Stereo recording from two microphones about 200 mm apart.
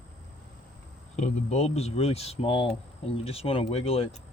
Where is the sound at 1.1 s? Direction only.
35° left (ahead or behind).